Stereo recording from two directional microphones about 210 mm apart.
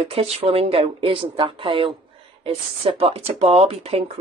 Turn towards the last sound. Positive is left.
turn(degrees=-30)  # may be behind; listen again after turning